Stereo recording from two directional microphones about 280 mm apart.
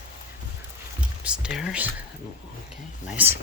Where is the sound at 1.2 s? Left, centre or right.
Centre.